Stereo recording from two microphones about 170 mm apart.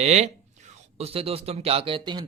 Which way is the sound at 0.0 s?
40° right (ahead or behind).